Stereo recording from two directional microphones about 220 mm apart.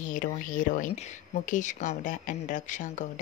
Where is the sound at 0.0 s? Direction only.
35° left (ahead or behind).